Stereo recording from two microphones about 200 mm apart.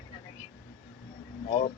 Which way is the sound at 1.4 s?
35° left (ahead or behind).